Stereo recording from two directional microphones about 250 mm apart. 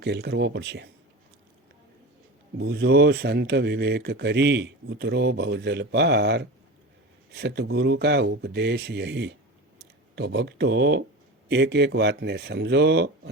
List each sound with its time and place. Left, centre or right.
0.0 s speech: right
2.6 s speech: right